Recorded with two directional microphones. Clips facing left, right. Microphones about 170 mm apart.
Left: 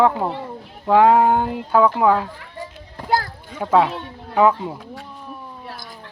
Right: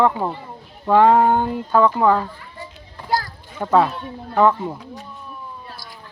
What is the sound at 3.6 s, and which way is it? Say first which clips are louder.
Speech: even; 5° left (ahead or behind).